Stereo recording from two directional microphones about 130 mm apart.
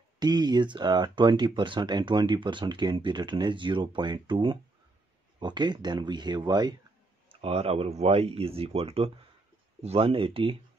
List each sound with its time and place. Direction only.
0.2 s speech: 30° right (ahead or behind)
7.2 s speech: 50° right (ahead or behind)